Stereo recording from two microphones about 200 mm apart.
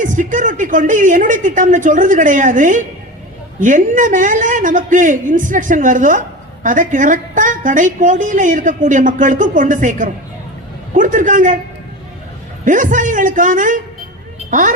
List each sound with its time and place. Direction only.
0.0 s a man's voice: 40° right (ahead or behind)
12.6 s a man's voice: 40° right (ahead or behind)